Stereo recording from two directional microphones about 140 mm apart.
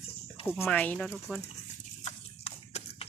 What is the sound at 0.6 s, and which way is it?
Speech, 10° left (ahead or behind).